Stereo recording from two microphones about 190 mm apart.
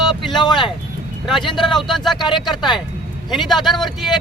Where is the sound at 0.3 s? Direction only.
25° left (ahead or behind).